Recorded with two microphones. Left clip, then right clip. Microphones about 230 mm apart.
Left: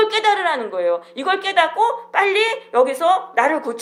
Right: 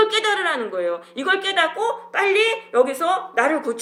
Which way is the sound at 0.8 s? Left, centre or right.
Centre.